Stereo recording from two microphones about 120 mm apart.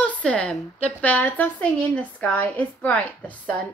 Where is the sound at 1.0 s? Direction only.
10° left (ahead or behind).